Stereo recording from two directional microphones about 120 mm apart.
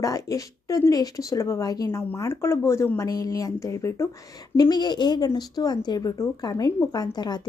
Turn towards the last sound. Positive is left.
turn(degrees=35)  # may be behind; listen again after turning